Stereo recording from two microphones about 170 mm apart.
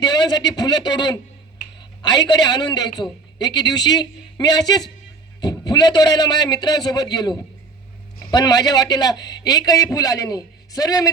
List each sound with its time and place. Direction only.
0.0 s speech: 25° left (ahead or behind)